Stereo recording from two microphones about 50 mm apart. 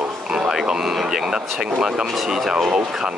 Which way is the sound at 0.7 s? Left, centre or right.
Centre.